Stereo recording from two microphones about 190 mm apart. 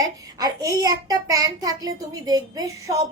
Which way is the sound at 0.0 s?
20° right (ahead or behind).